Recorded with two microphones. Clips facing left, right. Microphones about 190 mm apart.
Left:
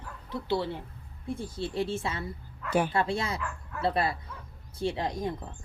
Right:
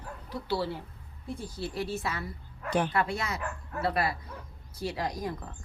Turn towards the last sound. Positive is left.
turn(degrees=25)  # may be behind; listen again after turning